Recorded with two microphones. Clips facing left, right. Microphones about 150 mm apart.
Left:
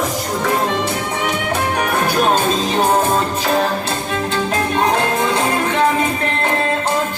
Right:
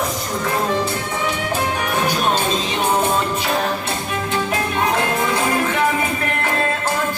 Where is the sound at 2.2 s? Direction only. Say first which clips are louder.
Left 4 dB; 45° left (ahead or behind).